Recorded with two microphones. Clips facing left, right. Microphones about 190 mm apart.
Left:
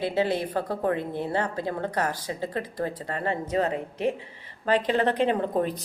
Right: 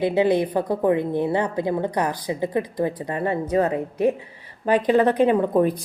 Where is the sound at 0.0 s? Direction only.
15° right (ahead or behind).